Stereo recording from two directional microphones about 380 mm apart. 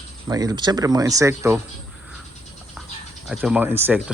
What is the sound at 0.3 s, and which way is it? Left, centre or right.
Speech, centre.